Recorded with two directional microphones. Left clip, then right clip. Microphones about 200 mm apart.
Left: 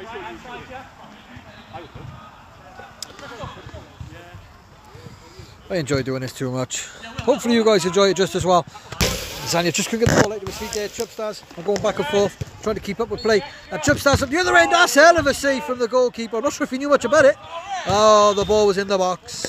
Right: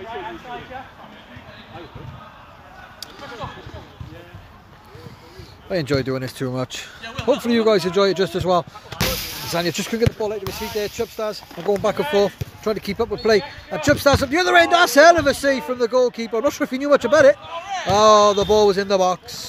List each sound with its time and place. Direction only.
5.7 s speech: 15° left (ahead or behind)
10.6 s speech: centre (ahead or behind)
11.8 s speech: 15° left (ahead or behind)